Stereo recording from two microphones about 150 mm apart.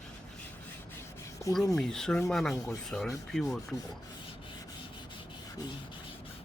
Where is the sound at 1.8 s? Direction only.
5° left (ahead or behind).